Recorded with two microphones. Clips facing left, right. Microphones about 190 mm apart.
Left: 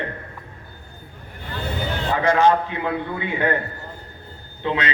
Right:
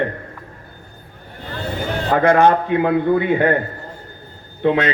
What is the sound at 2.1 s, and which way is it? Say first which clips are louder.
A man's voice: right 4 dB; 55° right (ahead or behind).